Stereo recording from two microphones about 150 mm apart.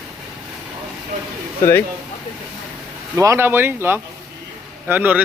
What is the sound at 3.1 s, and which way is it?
Speech, 15° right (ahead or behind).